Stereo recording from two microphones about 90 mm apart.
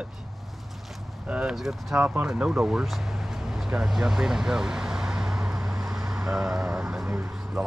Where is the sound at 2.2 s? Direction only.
10° right (ahead or behind).